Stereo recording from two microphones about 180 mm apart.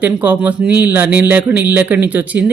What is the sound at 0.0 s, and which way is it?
Speech, 10° right (ahead or behind).